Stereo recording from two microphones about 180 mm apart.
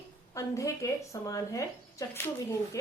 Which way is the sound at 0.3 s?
15° left (ahead or behind).